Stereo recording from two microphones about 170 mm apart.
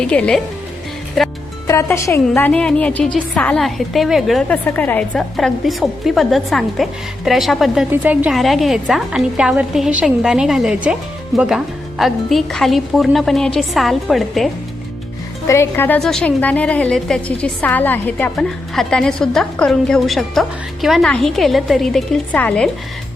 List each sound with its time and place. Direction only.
0.0 s a woman's voice: 5° left (ahead or behind)
1.6 s a woman's voice: 15° left (ahead or behind); by 14.5 s centre (ahead or behind)
15.4 s a woman's voice: 15° left (ahead or behind)